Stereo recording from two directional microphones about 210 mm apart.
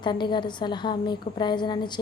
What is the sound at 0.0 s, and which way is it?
A woman's voice, 20° left (ahead or behind).